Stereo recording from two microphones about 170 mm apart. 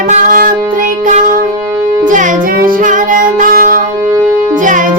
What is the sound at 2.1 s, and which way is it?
Music, 50° right (ahead or behind).